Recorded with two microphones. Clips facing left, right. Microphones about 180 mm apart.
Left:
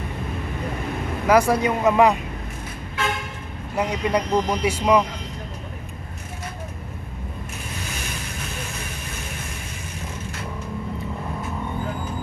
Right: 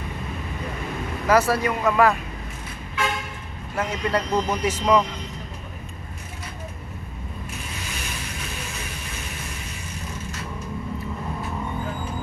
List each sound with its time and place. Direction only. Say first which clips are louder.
1.2 s speech: left 2 dB; 15° left (ahead or behind)
3.7 s speech: left 2 dB; 15° left (ahead or behind)